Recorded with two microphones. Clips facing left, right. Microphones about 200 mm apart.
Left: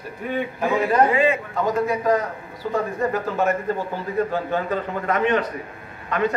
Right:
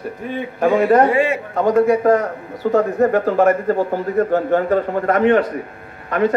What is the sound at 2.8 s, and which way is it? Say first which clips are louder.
A man's voice: right 8 dB; 65° right (ahead or behind).